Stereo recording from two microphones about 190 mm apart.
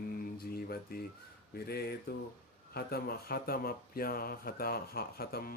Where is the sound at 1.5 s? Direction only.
55° left (ahead or behind).